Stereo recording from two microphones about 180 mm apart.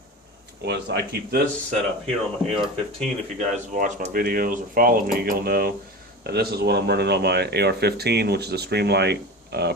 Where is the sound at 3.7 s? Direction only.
45° right (ahead or behind); by 9.7 s 65° right (ahead or behind).